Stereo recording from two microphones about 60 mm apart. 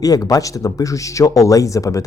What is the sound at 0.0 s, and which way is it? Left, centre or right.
Speech, left.